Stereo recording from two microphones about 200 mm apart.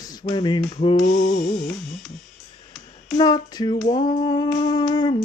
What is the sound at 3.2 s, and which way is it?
Speech, 20° left (ahead or behind).